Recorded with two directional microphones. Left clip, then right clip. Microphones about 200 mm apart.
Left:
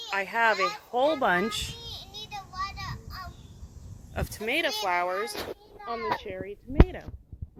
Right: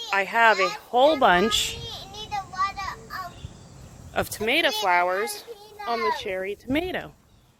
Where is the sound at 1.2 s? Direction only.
5° right (ahead or behind).